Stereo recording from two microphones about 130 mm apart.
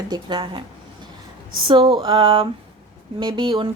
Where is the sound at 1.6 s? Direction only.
40° right (ahead or behind).